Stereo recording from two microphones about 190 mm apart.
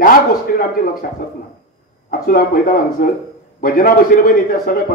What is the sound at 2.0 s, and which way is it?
A man's voice, 50° left (ahead or behind).